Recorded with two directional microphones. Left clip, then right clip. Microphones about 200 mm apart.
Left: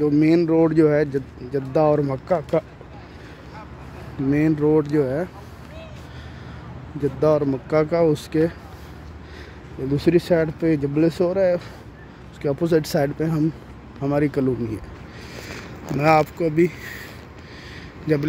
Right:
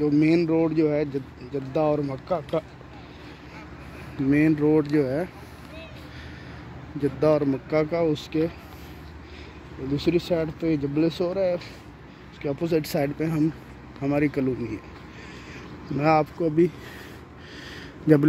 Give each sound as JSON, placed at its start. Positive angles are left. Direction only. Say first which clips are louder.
{"t": 0.0, "sound": "speech", "louder": "left 3 dB", "side_deg": 25}
{"t": 4.3, "sound": "speech", "louder": "left 2 dB", "side_deg": 5}
{"t": 7.2, "sound": "speech", "louder": "left 3 dB", "side_deg": 5}
{"t": 9.9, "sound": "speech", "louder": "left 6 dB", "side_deg": 30}
{"t": 16.0, "sound": "speech", "louder": "left 4 dB", "side_deg": 0}